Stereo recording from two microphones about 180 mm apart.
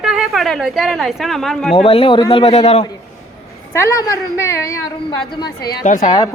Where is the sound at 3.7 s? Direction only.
15° left (ahead or behind).